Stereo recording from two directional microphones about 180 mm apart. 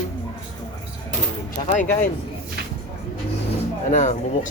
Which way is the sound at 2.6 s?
60° right (ahead or behind).